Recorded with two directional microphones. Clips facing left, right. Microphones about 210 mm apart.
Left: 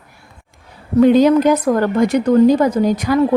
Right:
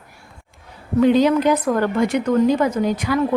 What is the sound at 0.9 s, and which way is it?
A woman's voice, 45° left (ahead or behind).